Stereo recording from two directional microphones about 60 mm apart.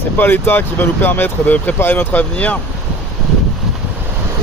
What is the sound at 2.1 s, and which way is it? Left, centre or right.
Speech, left.